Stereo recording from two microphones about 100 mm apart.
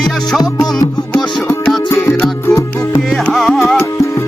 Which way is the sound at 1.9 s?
25° left (ahead or behind).